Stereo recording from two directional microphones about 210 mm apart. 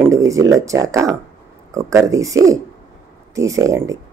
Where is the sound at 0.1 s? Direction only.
15° right (ahead or behind).